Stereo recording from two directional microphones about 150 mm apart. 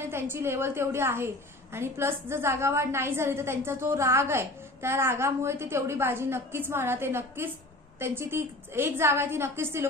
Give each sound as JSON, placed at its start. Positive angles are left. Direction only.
{"t": 0.1, "sound": "a woman's voice", "side_deg": -15}